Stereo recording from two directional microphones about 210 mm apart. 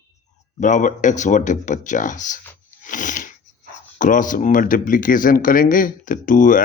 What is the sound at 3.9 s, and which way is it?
Speech, 40° left (ahead or behind).